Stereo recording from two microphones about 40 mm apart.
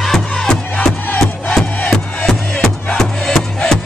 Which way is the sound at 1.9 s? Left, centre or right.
Centre.